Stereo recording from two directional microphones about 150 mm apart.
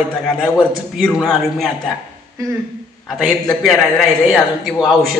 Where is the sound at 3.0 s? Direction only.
Centre (ahead or behind).